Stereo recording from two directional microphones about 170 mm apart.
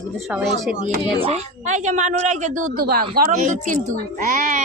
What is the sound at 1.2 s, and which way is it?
A woman's voice, 40° right (ahead or behind).